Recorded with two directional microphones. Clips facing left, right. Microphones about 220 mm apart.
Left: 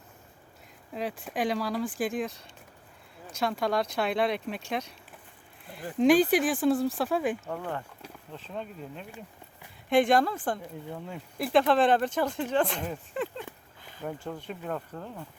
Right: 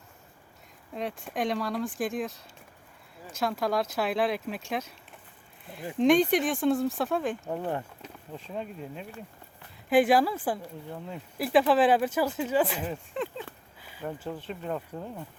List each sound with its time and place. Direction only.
0.9 s speech: centre (ahead or behind)
7.4 s speech: 20° right (ahead or behind)
8.3 s speech: 10° right (ahead or behind)